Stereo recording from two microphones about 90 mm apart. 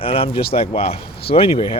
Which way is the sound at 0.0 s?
90° left.